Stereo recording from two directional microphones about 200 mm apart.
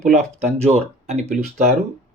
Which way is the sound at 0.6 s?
35° right (ahead or behind).